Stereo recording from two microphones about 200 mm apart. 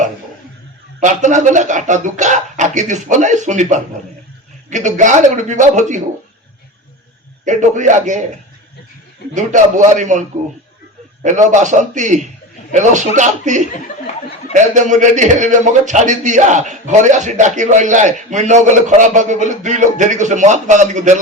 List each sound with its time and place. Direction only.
0.9 s a man's voice: 40° right (ahead or behind)
7.4 s a man's voice: 35° right (ahead or behind)
9.3 s a man's voice: 40° right (ahead or behind)